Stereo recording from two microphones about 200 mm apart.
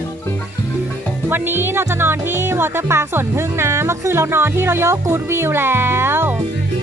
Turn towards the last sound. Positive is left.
turn(degrees=-10)  # may be behind; listen again after turning